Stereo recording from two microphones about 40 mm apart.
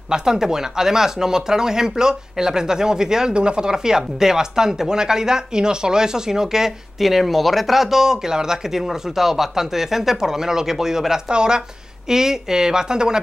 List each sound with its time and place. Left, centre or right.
0.1 s speech: centre